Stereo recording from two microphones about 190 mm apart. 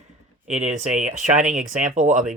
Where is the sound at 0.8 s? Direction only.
40° right (ahead or behind).